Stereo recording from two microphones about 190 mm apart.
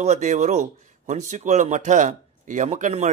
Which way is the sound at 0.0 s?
40° right (ahead or behind).